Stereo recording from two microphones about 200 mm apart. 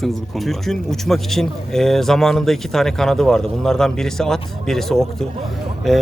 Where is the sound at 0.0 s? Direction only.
Centre (ahead or behind).